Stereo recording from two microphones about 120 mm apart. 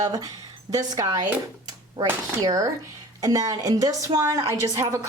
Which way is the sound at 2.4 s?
30° right (ahead or behind).